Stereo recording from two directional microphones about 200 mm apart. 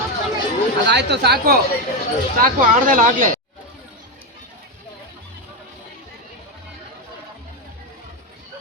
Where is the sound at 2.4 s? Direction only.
45° right (ahead or behind).